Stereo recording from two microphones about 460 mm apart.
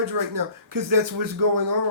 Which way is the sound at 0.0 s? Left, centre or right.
Right.